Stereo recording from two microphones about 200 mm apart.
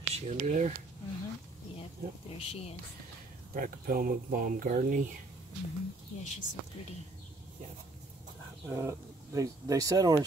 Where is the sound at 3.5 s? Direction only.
45° right (ahead or behind).